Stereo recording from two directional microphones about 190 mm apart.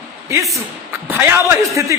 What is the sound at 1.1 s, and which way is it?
Speech, 15° right (ahead or behind).